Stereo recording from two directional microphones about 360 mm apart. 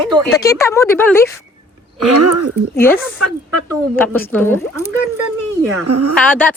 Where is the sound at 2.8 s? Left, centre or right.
Centre.